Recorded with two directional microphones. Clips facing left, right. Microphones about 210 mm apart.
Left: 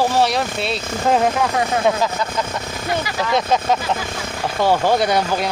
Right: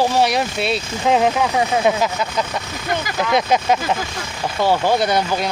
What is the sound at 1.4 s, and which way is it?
Speech, 10° right (ahead or behind).